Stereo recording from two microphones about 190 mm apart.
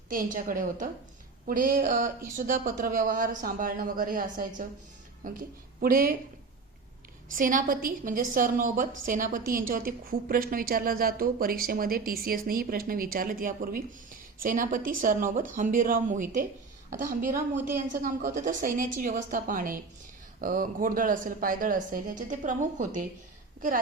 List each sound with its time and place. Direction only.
0.1 s a woman's voice: 45° right (ahead or behind)
7.3 s a woman's voice: 45° right (ahead or behind)